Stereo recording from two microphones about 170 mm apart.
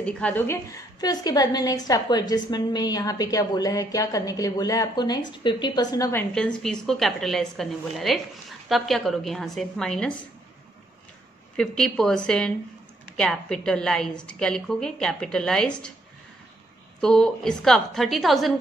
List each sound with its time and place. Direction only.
0.0 s a woman's voice: 5° left (ahead or behind)
6.3 s speech: 5° left (ahead or behind)
11.5 s speech: 5° left (ahead or behind)
17.0 s speech: 5° left (ahead or behind)